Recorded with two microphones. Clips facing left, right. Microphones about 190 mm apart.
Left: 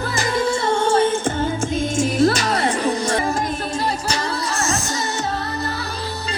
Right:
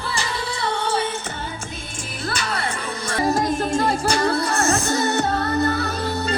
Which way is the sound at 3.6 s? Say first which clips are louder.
Right 3 dB; 50° right (ahead or behind).